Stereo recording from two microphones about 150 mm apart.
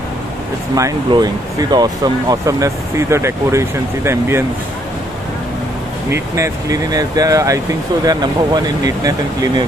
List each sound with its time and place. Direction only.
0.7 s speech: 25° right (ahead or behind)
6.1 s speech: 20° right (ahead or behind)